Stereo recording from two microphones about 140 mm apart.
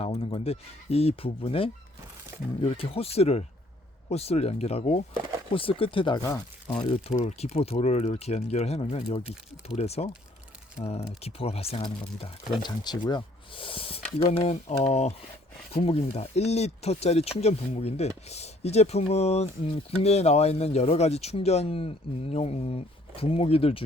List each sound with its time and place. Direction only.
0.0 s speech: 40° left (ahead or behind)
12.6 s speech: 30° left (ahead or behind)